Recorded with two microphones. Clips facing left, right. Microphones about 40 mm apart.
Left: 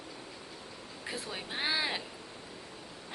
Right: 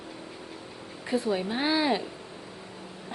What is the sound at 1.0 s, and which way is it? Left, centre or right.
Speech, centre.